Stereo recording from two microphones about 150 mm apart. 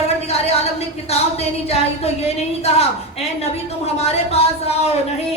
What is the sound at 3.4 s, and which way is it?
A woman's voice, 45° left (ahead or behind).